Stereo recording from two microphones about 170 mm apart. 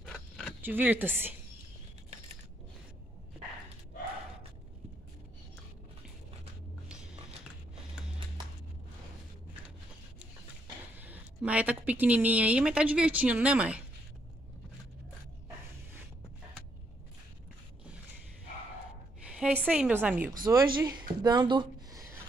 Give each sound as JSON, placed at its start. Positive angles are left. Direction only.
{"t": 0.0, "sound": "zipper", "side_deg": 5}
{"t": 0.6, "sound": "speech", "side_deg": -10}
{"t": 11.0, "sound": "speech", "side_deg": -10}
{"t": 19.2, "sound": "a woman's voice", "side_deg": -5}
{"t": 20.4, "sound": "speech", "side_deg": -25}